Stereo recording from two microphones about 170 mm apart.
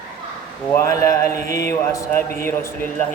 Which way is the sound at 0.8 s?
20° left (ahead or behind).